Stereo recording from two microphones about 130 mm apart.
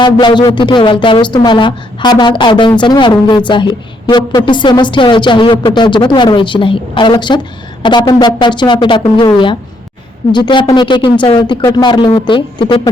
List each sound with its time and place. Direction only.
0.0 s a woman's voice: 35° left (ahead or behind)